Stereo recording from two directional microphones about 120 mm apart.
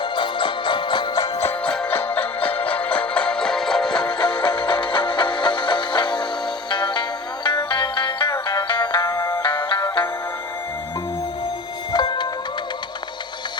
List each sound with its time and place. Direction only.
0.0 s music: 45° left (ahead or behind)
1.6 s music: 10° left (ahead or behind)
4.0 s music: 45° left (ahead or behind)
11.9 s music: 40° left (ahead or behind)